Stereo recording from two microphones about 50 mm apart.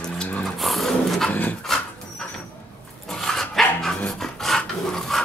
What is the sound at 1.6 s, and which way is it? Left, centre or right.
Dog, centre.